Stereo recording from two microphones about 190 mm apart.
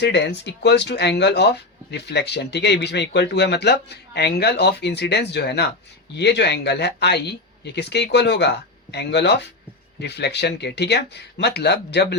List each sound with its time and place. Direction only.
0.0 s speech: 65° left (ahead or behind)